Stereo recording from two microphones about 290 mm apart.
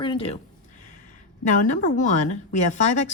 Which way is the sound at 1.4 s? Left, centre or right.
Left.